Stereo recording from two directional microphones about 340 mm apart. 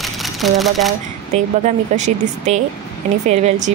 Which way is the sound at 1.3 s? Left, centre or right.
Right.